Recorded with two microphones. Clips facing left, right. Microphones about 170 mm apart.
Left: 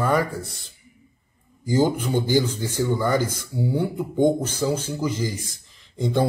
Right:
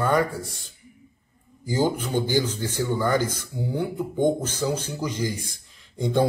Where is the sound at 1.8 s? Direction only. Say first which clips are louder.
Left 2 dB; 15° left (ahead or behind).